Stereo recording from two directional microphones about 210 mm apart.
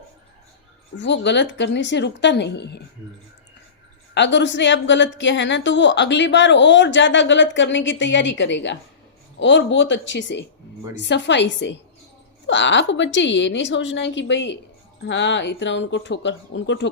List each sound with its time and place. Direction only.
0.9 s a woman's voice: 55° left (ahead or behind)
4.1 s a woman's voice: 55° left (ahead or behind)